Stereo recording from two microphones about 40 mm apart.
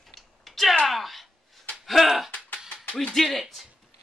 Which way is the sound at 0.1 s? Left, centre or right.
Centre.